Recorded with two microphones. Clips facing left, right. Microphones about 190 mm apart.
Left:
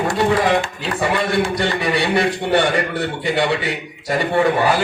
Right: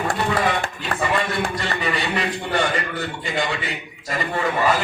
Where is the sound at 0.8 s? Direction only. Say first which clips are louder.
Left 3 dB; 75° left (ahead or behind).